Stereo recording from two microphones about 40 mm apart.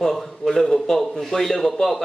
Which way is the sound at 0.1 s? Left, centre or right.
Centre.